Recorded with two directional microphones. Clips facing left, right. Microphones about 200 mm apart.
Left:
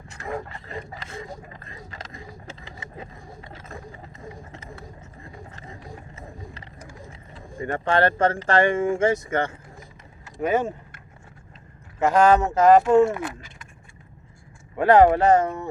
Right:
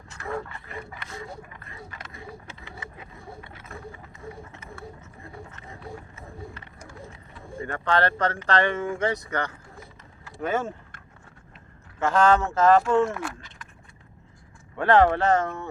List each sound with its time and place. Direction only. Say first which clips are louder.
0.3 s speech: left 1 dB; 20° left (ahead or behind)
7.6 s speech: left 3 dB; 20° left (ahead or behind)
11.9 s speech: left 3 dB; 15° left (ahead or behind)
14.8 s speech: left 4 dB; 15° left (ahead or behind)